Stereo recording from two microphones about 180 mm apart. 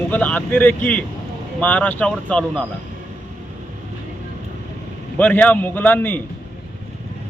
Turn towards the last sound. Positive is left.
turn(degrees=10)  # may be behind; listen again after turning